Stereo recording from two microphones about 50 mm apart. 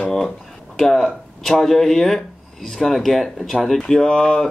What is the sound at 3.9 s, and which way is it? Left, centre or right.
Speech, centre.